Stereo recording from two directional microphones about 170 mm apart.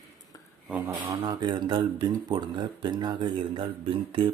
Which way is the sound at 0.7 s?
15° right (ahead or behind).